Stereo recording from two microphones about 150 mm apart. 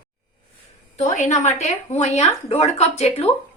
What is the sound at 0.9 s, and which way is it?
Speech, 50° left (ahead or behind).